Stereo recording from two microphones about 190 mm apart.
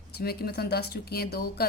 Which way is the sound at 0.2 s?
55° left (ahead or behind).